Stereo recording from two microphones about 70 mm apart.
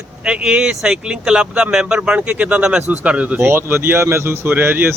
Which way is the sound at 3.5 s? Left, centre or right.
Right.